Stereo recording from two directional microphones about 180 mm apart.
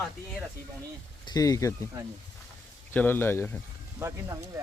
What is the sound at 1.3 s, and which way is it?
Speech, 20° left (ahead or behind).